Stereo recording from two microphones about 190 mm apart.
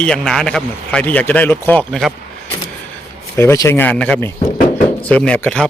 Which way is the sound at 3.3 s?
15° left (ahead or behind).